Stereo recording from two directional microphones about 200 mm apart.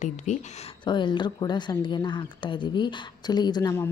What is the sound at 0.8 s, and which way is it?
Speech, 25° left (ahead or behind).